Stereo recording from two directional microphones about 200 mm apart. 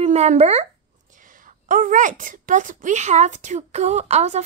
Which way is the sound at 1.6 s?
40° right (ahead or behind).